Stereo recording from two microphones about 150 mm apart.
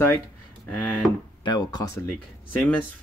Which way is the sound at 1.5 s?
25° left (ahead or behind).